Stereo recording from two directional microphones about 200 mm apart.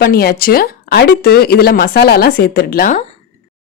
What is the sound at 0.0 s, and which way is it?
A woman's voice, 50° left (ahead or behind).